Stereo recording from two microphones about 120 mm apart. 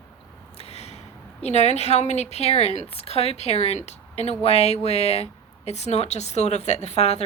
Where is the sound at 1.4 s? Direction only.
70° left (ahead or behind).